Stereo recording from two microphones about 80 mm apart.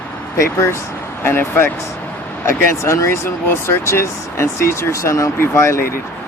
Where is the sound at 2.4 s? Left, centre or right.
Left.